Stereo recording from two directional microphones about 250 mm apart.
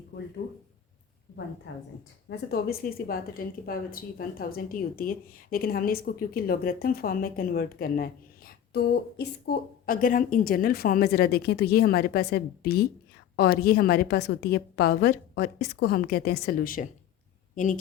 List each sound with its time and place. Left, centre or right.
2.5 s a woman's voice: left